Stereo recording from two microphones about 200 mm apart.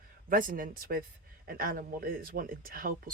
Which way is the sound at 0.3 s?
45° right (ahead or behind).